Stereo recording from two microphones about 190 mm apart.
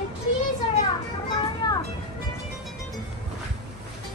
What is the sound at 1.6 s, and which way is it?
Music, 20° left (ahead or behind).